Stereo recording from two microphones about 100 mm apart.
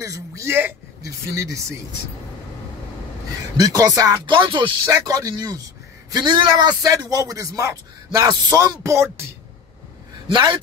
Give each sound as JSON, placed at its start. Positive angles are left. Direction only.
{"t": 0.0, "sound": "speech", "side_deg": -35}
{"t": 3.5, "sound": "speech", "side_deg": -40}
{"t": 4.3, "sound": "speech", "side_deg": -55}
{"t": 4.8, "sound": "speech", "side_deg": -40}
{"t": 6.9, "sound": "speech", "side_deg": -35}
{"t": 10.2, "sound": "speech", "side_deg": -55}